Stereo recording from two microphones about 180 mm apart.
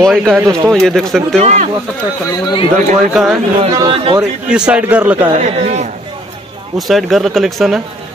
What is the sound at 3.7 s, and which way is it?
Speech, 30° right (ahead or behind).